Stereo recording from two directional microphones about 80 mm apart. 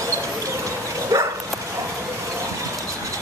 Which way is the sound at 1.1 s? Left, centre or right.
Right.